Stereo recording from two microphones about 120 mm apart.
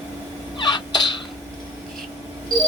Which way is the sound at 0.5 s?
40° left (ahead or behind).